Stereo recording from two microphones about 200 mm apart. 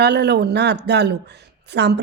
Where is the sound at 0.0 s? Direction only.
55° right (ahead or behind).